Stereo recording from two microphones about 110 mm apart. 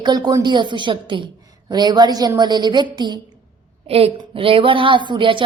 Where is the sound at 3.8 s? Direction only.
60° right (ahead or behind).